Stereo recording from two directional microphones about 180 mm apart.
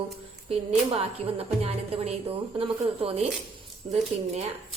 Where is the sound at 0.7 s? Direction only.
35° right (ahead or behind).